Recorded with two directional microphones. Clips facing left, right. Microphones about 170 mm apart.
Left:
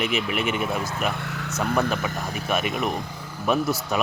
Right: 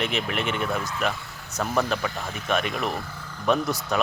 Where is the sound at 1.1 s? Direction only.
75° left (ahead or behind).